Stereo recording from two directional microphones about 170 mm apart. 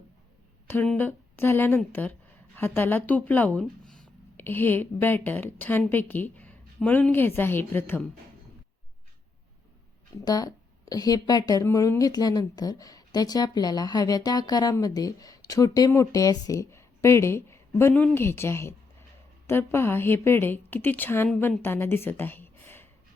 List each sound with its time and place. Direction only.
0.7 s a woman's voice: 10° left (ahead or behind)
10.2 s a woman's voice: 20° left (ahead or behind)